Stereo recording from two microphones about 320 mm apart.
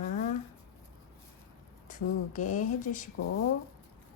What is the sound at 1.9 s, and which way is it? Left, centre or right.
Speech, left.